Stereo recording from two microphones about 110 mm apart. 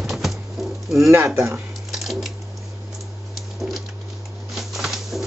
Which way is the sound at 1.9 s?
Centre (ahead or behind).